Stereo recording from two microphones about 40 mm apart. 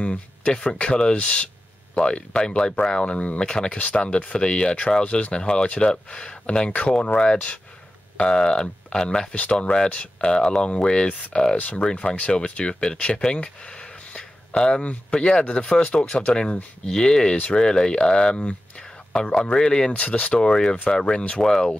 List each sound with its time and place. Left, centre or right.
0.0 s a sound: left
0.7 s speech: left
9.3 s speech: left
9.6 s speech: left
11.8 s speech: left
13.2 s speech: left
16.8 s speech: centre
20.3 s speech: centre